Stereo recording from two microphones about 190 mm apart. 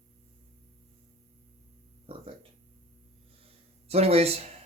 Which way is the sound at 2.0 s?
30° right (ahead or behind).